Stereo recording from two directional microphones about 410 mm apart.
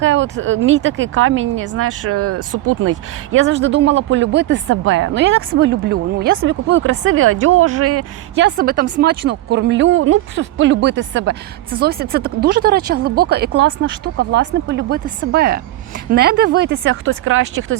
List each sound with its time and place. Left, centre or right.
0.0 s speech: right